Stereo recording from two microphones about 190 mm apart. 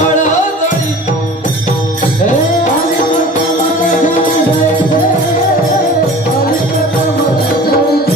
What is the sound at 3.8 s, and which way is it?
Music, 40° left (ahead or behind).